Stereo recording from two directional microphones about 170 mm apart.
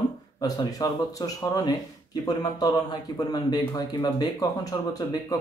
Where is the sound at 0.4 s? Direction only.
20° left (ahead or behind).